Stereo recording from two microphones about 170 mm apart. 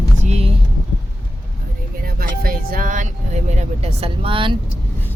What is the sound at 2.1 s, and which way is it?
Music, 60° right (ahead or behind).